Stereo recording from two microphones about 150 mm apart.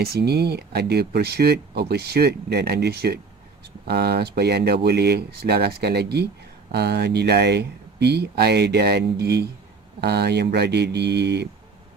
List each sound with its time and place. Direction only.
0.0 s speech: 90° right